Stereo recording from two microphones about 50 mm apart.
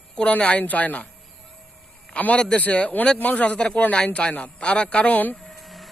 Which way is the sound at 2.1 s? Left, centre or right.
Left.